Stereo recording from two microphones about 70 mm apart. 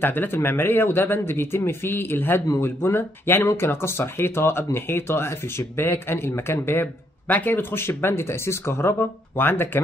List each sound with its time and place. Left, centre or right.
0.0 s speech: left